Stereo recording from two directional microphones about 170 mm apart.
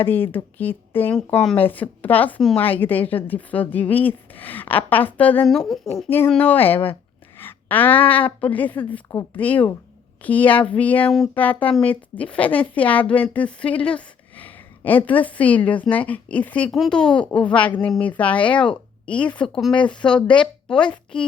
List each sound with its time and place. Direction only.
0.0 s speech: 10° left (ahead or behind)
6.1 s speech: 10° left (ahead or behind)
7.3 s a sound: 10° left (ahead or behind)
8.4 s speech: 10° left (ahead or behind)